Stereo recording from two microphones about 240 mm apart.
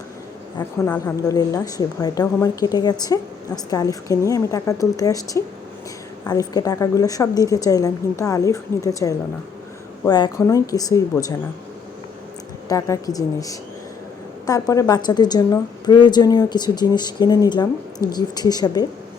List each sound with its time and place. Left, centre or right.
0.6 s a woman's voice: centre
12.6 s a woman's voice: centre